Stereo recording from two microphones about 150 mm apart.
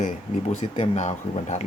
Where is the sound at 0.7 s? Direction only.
45° left (ahead or behind).